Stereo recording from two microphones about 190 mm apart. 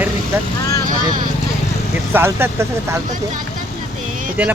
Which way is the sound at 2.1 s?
10° right (ahead or behind).